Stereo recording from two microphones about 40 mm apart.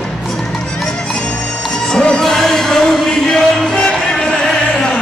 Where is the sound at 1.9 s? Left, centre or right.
Centre.